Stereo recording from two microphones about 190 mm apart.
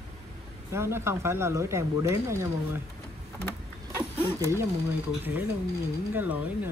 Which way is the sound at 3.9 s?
15° right (ahead or behind).